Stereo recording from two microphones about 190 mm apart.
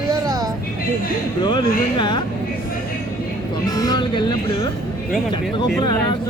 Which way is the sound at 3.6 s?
20° left (ahead or behind).